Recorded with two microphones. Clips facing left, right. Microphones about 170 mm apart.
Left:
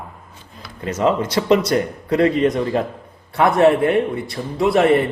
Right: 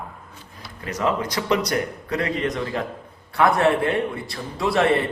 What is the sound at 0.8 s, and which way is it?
A man's voice, 25° left (ahead or behind).